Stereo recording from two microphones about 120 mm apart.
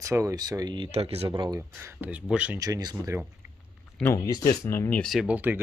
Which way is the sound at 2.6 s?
30° right (ahead or behind).